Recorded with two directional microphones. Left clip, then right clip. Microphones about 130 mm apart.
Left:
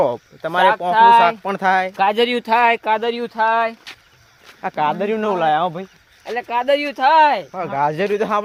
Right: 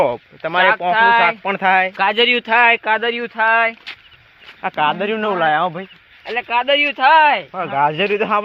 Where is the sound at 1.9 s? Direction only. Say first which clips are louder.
Right 2 dB; 75° left (ahead or behind).